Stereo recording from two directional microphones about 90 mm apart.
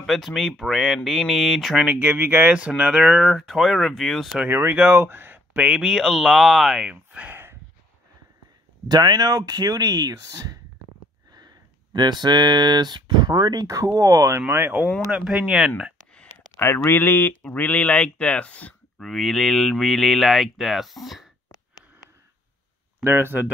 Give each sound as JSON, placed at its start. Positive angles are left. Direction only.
{"t": 0.0, "sound": "speech", "side_deg": 0}
{"t": 2.0, "sound": "speech", "side_deg": -20}
{"t": 4.4, "sound": "speech", "side_deg": -20}
{"t": 5.7, "sound": "speech", "side_deg": -10}
{"t": 8.8, "sound": "speech", "side_deg": -50}
{"t": 15.0, "sound": "speech", "side_deg": -10}
{"t": 16.5, "sound": "speech", "side_deg": 25}
{"t": 18.9, "sound": "speech", "side_deg": 5}
{"t": 23.0, "sound": "speech", "side_deg": -25}